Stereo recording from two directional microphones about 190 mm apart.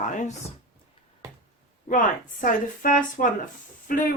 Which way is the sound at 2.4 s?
45° left (ahead or behind).